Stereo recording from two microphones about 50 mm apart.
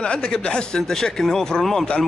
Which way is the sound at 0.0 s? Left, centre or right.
Centre.